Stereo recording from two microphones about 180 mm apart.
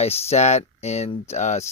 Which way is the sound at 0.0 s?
35° left (ahead or behind).